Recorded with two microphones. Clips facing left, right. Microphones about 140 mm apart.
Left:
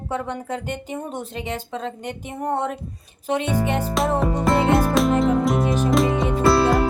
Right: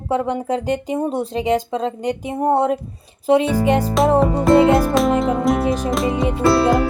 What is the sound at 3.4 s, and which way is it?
Music, 90° right.